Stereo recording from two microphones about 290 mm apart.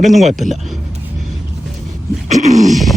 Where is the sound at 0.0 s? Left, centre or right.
Centre.